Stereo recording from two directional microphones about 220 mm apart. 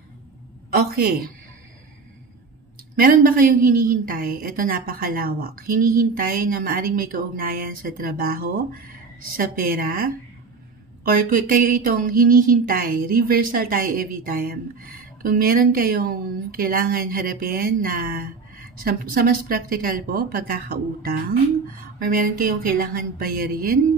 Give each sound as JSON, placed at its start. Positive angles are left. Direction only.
{"t": 0.7, "sound": "a man's voice", "side_deg": -45}
{"t": 3.0, "sound": "speech", "side_deg": -40}